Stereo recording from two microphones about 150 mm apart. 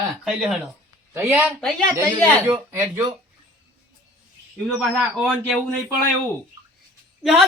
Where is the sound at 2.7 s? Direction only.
15° right (ahead or behind).